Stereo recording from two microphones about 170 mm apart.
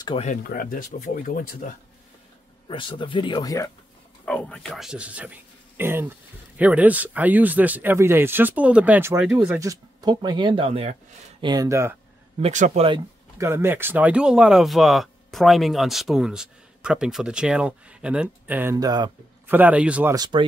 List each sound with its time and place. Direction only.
0.2 s speech: 50° left (ahead or behind)
2.7 s speech: 30° left (ahead or behind)
4.3 s speech: 5° left (ahead or behind)
9.6 s speech: 20° right (ahead or behind)
11.4 s speech: 20° right (ahead or behind)
12.4 s speech: 40° right (ahead or behind)
13.4 s speech: 15° right (ahead or behind)
18.8 s speech: 25° right (ahead or behind)
19.4 s speech: 10° right (ahead or behind)
20.2 s speech: 30° right (ahead or behind)